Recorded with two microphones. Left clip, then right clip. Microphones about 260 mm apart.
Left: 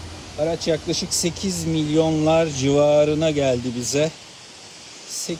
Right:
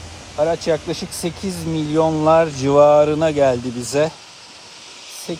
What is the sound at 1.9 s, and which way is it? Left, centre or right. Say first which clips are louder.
Speech: right 4 dB; right.